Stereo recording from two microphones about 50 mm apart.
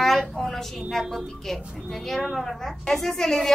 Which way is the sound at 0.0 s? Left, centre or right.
Centre.